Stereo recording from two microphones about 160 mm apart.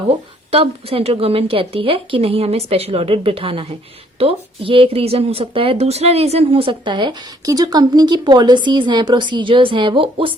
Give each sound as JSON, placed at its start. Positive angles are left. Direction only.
{"t": 0.1, "sound": "a woman's voice", "side_deg": -35}